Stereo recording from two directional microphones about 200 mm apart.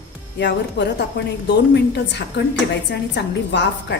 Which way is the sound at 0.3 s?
60° left (ahead or behind).